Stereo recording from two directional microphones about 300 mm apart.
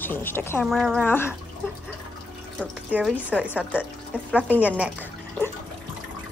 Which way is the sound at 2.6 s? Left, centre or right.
Centre.